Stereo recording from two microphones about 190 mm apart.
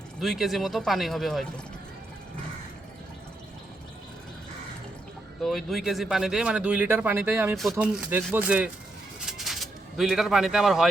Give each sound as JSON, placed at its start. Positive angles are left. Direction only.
{"t": 0.2, "sound": "speech", "side_deg": 0}
{"t": 5.4, "sound": "speech", "side_deg": 0}
{"t": 7.5, "sound": "speech", "side_deg": 0}
{"t": 9.2, "sound": "a sound", "side_deg": 0}